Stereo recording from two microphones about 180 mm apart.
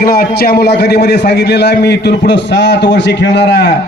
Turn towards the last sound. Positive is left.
turn(degrees=70)  # may be behind; listen again after turning